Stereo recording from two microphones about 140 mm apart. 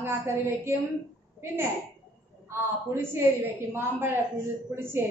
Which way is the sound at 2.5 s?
15° right (ahead or behind).